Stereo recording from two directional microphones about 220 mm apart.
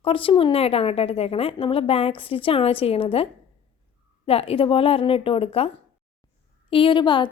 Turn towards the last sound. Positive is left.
turn(degrees=20)  # may be behind; listen again after turning